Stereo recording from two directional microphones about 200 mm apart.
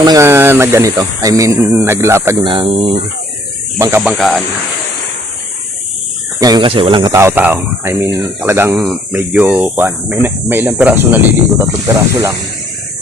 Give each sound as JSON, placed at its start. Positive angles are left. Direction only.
{"t": 0.0, "sound": "speech", "side_deg": -15}
{"t": 2.4, "sound": "speech", "side_deg": -25}
{"t": 3.8, "sound": "speech", "side_deg": -15}
{"t": 4.2, "sound": "speech", "side_deg": 0}
{"t": 6.4, "sound": "speech", "side_deg": -20}
{"t": 7.1, "sound": "speech", "side_deg": -15}